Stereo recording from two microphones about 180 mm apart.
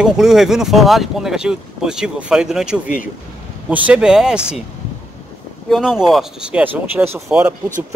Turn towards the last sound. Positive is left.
turn(degrees=-15)  # may be behind; listen again after turning